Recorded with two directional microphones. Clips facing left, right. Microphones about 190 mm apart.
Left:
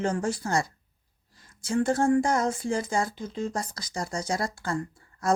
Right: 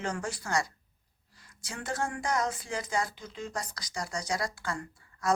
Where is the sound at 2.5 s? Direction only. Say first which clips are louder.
Left 8 dB; 45° left (ahead or behind).